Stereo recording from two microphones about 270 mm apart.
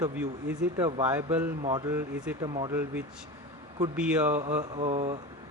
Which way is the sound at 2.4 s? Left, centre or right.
Centre.